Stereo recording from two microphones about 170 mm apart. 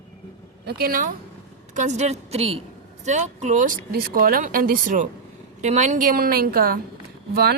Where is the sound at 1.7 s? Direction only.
45° right (ahead or behind); by 7.5 s 70° right (ahead or behind).